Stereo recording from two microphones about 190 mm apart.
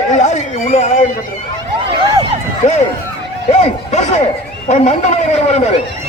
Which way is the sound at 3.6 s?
35° left (ahead or behind).